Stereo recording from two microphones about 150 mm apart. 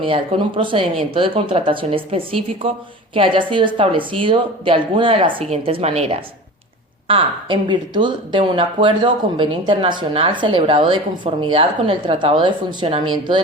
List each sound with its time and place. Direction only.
0.0 s speech: 35° right (ahead or behind)